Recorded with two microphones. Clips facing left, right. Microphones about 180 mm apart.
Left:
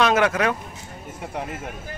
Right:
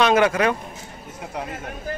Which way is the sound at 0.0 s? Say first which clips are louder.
Right 2 dB; centre (ahead or behind).